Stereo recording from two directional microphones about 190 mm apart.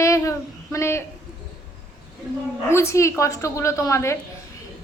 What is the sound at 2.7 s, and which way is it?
A woman's voice, 15° left (ahead or behind).